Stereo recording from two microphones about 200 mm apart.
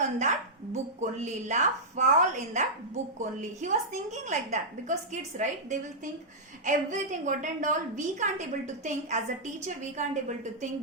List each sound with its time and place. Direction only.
0.0 s a woman's voice: 35° right (ahead or behind)